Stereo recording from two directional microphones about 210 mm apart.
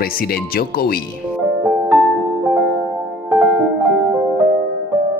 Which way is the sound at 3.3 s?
5° right (ahead or behind).